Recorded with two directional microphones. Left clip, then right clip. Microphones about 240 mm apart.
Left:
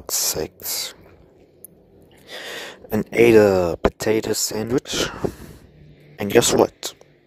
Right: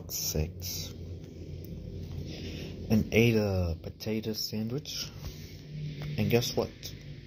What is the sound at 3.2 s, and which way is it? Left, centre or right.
Speech, left.